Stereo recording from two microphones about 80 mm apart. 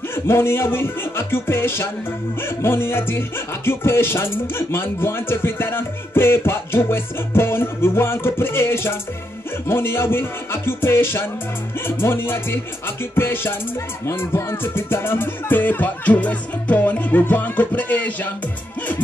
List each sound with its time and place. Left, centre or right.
0.1 s music: left